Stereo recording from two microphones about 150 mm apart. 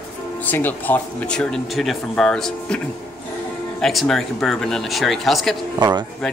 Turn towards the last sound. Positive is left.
turn(degrees=-30)  # may be behind; listen again after turning